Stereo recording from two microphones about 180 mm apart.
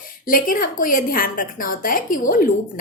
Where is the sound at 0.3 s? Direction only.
50° left (ahead or behind).